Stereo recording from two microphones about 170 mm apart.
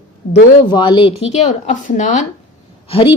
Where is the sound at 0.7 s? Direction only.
25° left (ahead or behind); by 2.2 s 45° left (ahead or behind).